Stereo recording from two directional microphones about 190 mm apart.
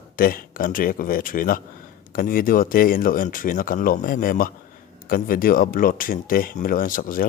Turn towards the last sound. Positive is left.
turn(degrees=45)  # may be behind; listen again after turning